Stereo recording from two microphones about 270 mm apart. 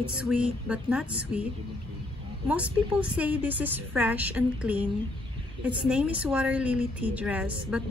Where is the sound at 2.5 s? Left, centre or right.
Centre.